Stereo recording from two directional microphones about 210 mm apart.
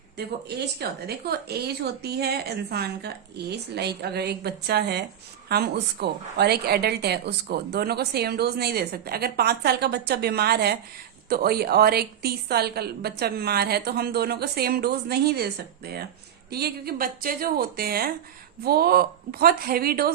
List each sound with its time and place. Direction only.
0.2 s a woman's voice: 50° right (ahead or behind)